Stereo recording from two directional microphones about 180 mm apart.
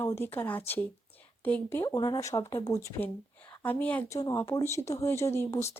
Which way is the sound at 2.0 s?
25° left (ahead or behind).